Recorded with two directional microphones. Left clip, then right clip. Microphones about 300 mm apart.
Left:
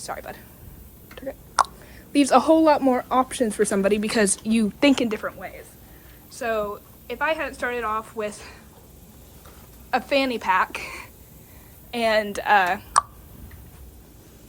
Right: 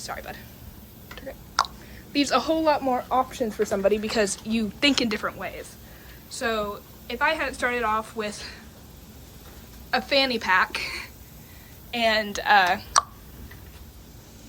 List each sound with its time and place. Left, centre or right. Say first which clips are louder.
0.0 s a woman's voice: left 2 dB; centre
1.1 s a sound: left 4 dB; centre
2.1 s a woman's voice: left 6 dB; centre
9.9 s a woman's voice: even; centre